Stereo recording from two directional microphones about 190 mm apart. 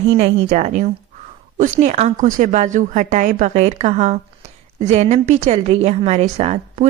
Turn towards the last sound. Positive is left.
turn(degrees=-35)  # may be behind; listen again after turning